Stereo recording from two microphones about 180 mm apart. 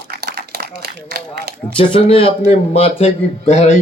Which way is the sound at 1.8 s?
30° left (ahead or behind).